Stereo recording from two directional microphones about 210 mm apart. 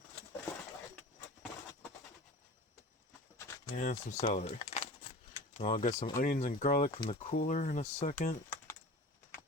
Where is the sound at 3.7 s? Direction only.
35° left (ahead or behind).